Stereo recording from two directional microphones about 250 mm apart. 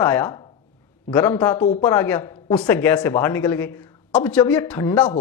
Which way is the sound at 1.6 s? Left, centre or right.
Left.